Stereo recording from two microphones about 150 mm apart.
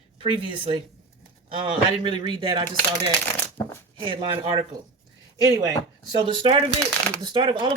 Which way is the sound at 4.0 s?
35° right (ahead or behind).